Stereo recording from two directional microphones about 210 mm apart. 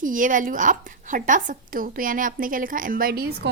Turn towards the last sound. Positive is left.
turn(degrees=-50)  # may be behind; listen again after turning